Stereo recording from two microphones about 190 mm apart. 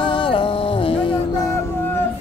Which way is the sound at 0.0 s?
25° left (ahead or behind).